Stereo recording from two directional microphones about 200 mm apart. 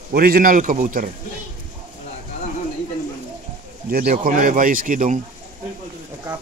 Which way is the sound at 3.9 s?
45° right (ahead or behind).